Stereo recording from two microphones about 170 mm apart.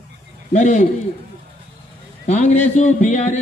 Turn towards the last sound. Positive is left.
turn(degrees=45)  # may be behind; listen again after turning